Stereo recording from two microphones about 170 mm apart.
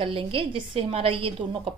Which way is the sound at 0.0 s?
30° right (ahead or behind).